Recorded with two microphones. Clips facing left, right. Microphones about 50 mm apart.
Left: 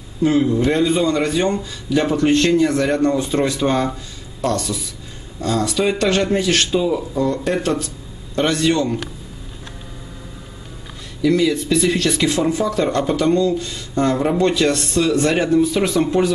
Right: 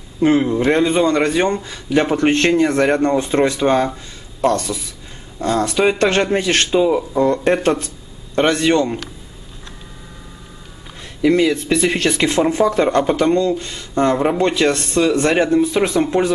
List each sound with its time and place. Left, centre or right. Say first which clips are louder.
0.2 s a man's voice: right 1 dB; right
11.1 s a man's voice: right 2 dB; right